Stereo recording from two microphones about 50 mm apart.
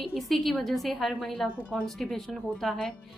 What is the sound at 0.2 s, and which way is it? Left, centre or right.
A woman's voice, centre.